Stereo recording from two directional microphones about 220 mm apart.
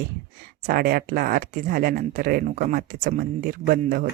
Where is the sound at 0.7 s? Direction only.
40° right (ahead or behind).